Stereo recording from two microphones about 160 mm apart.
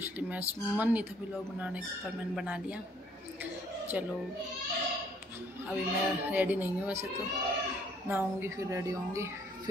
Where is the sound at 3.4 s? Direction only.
10° right (ahead or behind).